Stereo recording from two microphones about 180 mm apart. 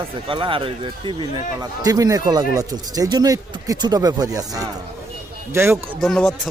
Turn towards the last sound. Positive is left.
turn(degrees=0)  # may be behind; listen again after turning